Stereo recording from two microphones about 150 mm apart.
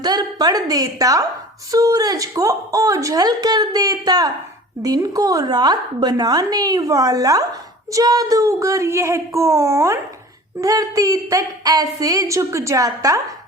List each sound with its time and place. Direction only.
0.0 s a woman's voice: 25° right (ahead or behind)